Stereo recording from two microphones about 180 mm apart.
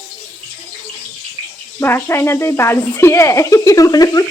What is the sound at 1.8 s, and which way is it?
Speech, 15° left (ahead or behind).